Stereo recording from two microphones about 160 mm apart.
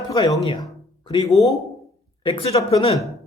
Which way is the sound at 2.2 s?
35° left (ahead or behind).